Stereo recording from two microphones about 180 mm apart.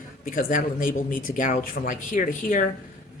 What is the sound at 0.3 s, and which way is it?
A man's voice, 50° left (ahead or behind).